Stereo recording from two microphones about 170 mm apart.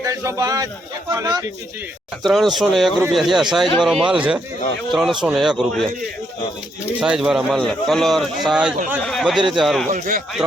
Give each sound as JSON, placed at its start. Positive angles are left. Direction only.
{"t": 0.0, "sound": "speech", "side_deg": -20}
{"t": 2.2, "sound": "a man's voice", "side_deg": 0}
{"t": 7.0, "sound": "a man's voice", "side_deg": -5}
{"t": 9.9, "sound": "speech", "side_deg": -55}